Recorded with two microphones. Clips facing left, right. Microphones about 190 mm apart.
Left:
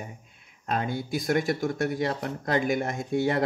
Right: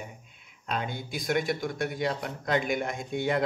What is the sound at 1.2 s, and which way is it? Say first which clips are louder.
Speech: left 2 dB; 40° left (ahead or behind).